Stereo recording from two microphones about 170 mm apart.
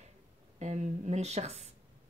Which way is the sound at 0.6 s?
40° right (ahead or behind).